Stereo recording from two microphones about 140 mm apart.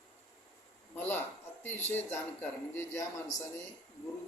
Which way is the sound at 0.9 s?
15° left (ahead or behind).